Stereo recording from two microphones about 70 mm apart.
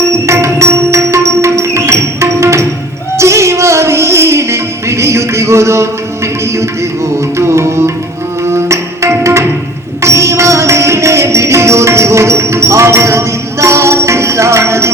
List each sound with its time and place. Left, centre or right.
0.3 s music: right
7.3 s music: right